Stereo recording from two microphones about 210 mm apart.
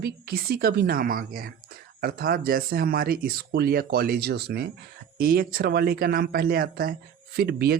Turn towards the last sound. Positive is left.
turn(degrees=-50)  # may be behind; listen again after turning